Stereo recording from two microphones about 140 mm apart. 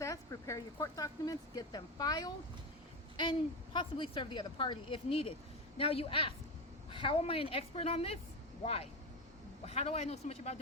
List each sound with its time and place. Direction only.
0.0 s a woman's voice: 25° left (ahead or behind); by 10.6 s 50° left (ahead or behind)